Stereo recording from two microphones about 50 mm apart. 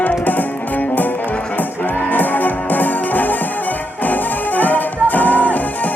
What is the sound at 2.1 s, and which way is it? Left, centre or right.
Music, left.